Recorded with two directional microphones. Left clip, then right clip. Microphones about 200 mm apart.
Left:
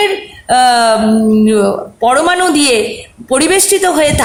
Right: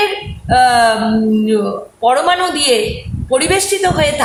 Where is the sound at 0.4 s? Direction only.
55° left (ahead or behind).